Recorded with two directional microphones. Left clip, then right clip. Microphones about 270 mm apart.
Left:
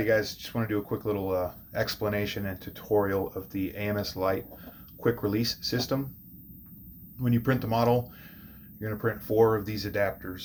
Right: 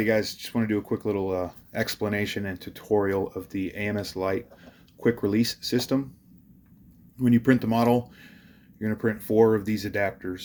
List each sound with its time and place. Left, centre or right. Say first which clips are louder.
0.0 s speech: right 1 dB; right
7.2 s speech: right 6 dB; right